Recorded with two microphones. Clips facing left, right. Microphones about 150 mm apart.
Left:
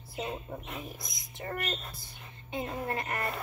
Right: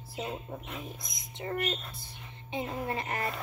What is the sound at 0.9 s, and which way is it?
Speech, 25° right (ahead or behind).